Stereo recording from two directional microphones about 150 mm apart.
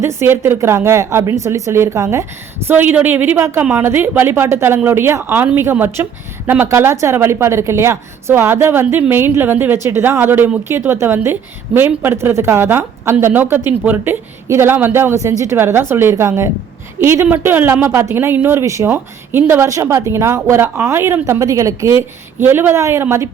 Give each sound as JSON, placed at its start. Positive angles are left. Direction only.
{"t": 0.0, "sound": "a woman's voice", "side_deg": -15}